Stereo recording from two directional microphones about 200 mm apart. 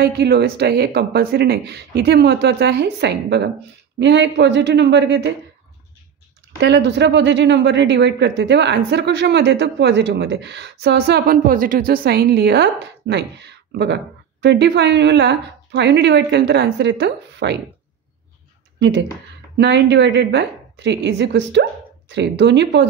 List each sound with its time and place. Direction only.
0.0 s speech: 55° right (ahead or behind)
6.6 s speech: 60° right (ahead or behind)
19.5 s speech: 60° right (ahead or behind)